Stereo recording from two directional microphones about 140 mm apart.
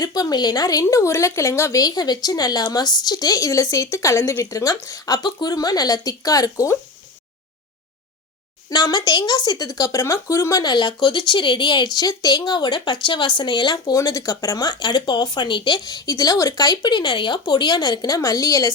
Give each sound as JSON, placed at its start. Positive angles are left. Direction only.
{"t": 0.0, "sound": "speech", "side_deg": 30}
{"t": 8.7, "sound": "speech", "side_deg": 30}